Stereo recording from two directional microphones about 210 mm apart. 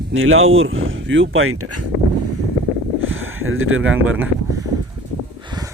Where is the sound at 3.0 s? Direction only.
70° right (ahead or behind).